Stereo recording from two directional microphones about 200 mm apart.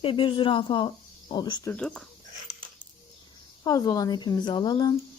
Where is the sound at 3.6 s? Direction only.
20° left (ahead or behind).